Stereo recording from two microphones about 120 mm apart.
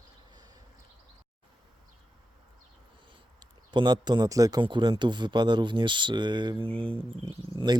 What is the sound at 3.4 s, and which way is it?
Speech, 40° right (ahead or behind).